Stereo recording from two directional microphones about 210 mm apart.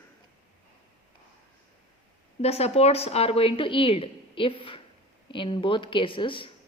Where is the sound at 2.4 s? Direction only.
30° left (ahead or behind).